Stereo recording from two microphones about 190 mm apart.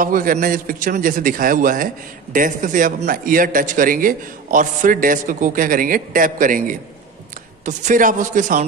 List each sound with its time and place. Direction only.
0.0 s a man's voice: 45° right (ahead or behind)